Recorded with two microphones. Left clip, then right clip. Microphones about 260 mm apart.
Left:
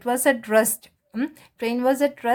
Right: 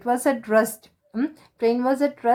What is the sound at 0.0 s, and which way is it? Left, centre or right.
A woman's voice, left.